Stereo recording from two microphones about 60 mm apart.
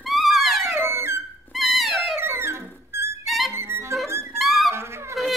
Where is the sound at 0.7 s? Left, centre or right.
Right.